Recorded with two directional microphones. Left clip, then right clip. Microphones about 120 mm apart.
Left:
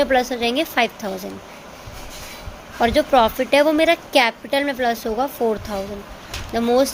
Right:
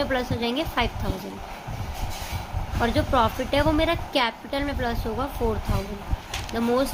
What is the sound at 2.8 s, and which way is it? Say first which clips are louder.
A woman's voice: left 7 dB; 60° left (ahead or behind).